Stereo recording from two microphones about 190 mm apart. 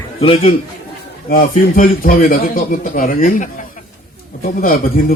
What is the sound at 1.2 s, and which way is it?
A man's voice, 50° left (ahead or behind).